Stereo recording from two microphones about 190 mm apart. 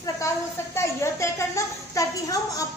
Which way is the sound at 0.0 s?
15° left (ahead or behind).